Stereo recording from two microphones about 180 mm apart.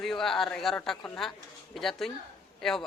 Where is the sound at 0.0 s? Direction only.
Centre (ahead or behind).